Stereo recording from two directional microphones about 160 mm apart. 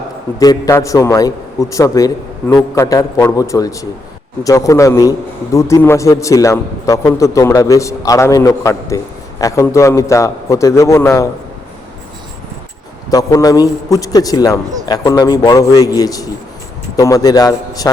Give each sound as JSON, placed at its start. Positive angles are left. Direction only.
{"t": 0.3, "sound": "a man's voice", "side_deg": 20}
{"t": 13.1, "sound": "a man's voice", "side_deg": 20}